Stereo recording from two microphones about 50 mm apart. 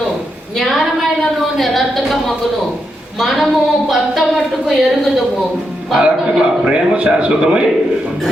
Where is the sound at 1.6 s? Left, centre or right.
Centre.